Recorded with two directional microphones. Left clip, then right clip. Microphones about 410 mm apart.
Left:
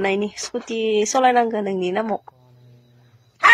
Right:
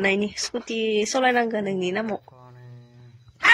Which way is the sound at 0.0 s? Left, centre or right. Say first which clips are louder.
Left 1 dB; right.